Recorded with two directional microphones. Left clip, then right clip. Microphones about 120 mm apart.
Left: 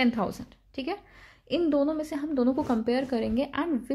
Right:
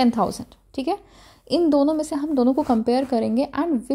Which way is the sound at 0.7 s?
55° right (ahead or behind).